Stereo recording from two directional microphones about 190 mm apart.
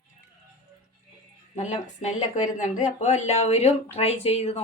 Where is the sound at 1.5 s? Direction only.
40° left (ahead or behind).